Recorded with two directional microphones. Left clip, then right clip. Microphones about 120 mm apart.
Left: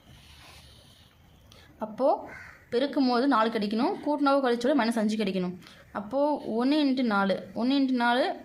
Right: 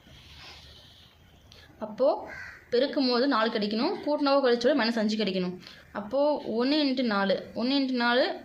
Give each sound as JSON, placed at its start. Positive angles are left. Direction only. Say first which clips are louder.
{"t": 1.8, "sound": "a woman's voice", "louder": "even", "side_deg": 60}